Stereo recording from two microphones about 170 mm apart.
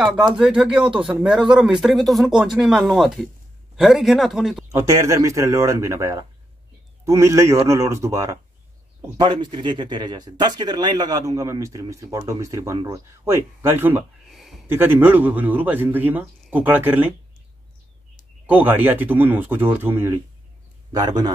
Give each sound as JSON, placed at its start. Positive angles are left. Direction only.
{"t": 0.4, "sound": "speech", "side_deg": -5}
{"t": 4.7, "sound": "speech", "side_deg": -20}
{"t": 14.3, "sound": "a sound", "side_deg": 0}
{"t": 14.7, "sound": "speech", "side_deg": -10}
{"t": 18.5, "sound": "speech", "side_deg": -10}
{"t": 20.9, "sound": "speech", "side_deg": -25}